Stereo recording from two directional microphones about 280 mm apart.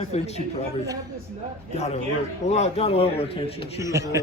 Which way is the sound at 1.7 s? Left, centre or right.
Left.